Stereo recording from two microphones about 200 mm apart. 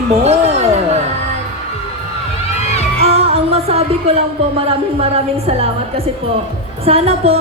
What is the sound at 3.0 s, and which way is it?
Music, 30° right (ahead or behind).